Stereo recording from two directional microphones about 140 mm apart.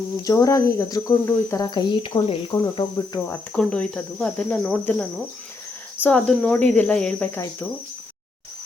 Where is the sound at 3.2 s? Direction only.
20° left (ahead or behind).